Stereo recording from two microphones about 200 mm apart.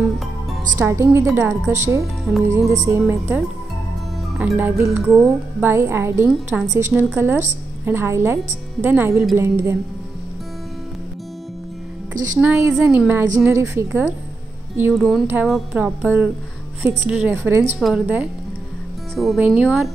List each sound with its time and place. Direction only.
0.7 s speech: 15° right (ahead or behind)
12.2 s speech: 10° right (ahead or behind)
17.7 s speech: centre (ahead or behind)